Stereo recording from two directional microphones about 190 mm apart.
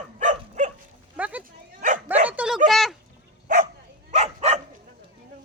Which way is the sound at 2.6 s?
Centre (ahead or behind).